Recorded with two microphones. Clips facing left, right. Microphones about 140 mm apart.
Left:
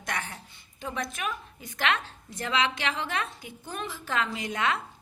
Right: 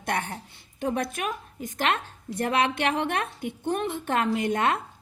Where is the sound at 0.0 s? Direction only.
55° right (ahead or behind).